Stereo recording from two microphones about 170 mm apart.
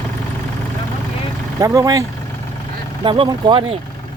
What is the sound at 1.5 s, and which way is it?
Speech, 20° right (ahead or behind).